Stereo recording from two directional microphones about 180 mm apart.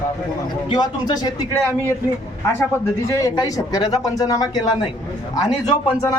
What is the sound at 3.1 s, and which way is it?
Speech, 20° left (ahead or behind).